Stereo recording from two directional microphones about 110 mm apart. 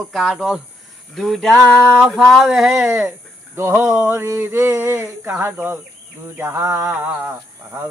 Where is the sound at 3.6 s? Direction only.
20° right (ahead or behind).